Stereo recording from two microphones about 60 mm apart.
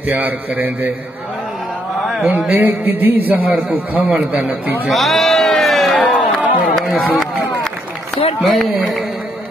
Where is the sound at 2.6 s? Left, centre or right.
Right.